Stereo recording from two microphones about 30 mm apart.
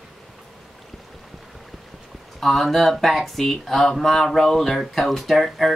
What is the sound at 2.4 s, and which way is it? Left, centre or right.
Speech, centre.